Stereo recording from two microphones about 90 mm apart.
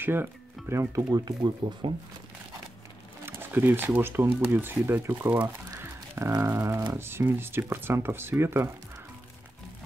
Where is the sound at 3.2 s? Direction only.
25° right (ahead or behind).